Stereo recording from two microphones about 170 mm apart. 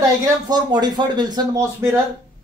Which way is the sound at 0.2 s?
25° right (ahead or behind).